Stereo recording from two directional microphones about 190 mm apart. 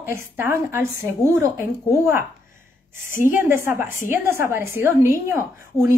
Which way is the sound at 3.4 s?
10° right (ahead or behind).